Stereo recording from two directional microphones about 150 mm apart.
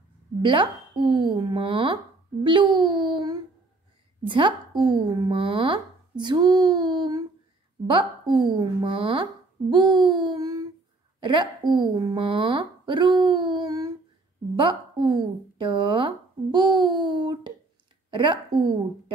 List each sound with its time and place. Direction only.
0.4 s speech: 35° right (ahead or behind)